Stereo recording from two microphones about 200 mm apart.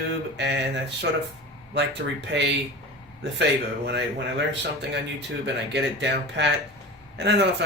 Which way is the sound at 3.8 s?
60° right (ahead or behind).